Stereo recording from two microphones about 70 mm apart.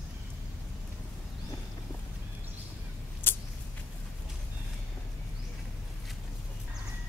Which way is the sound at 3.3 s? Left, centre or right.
Left.